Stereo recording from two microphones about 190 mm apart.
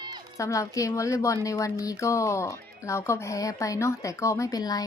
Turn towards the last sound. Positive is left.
turn(degrees=20)  # may be behind; listen again after turning